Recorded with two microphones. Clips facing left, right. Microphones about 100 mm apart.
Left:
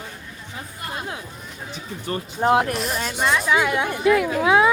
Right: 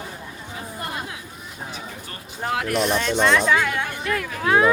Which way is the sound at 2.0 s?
30° left (ahead or behind).